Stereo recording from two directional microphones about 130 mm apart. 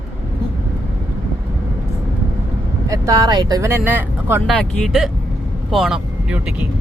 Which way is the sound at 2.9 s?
30° right (ahead or behind).